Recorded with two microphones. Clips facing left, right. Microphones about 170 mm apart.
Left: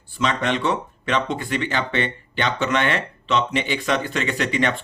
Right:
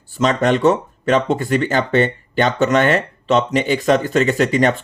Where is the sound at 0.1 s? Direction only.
45° right (ahead or behind).